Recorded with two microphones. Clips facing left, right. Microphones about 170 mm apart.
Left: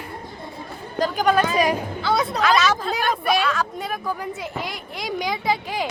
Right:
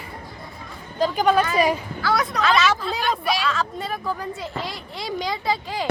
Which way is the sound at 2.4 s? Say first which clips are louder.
Even; centre (ahead or behind).